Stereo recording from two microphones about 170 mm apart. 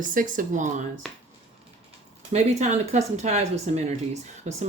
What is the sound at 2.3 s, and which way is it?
Speech, 40° right (ahead or behind).